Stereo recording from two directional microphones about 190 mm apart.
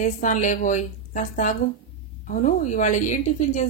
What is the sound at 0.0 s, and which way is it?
Speech, 40° left (ahead or behind).